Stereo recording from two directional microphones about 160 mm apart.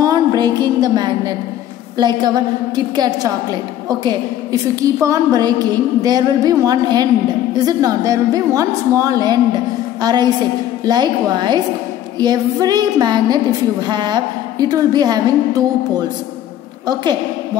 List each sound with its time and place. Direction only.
0.0 s a woman's voice: 25° right (ahead or behind)
16.8 s a woman's voice: 25° right (ahead or behind)